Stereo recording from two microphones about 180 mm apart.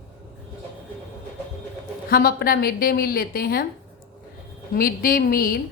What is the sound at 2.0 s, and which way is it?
A woman's voice, 55° left (ahead or behind).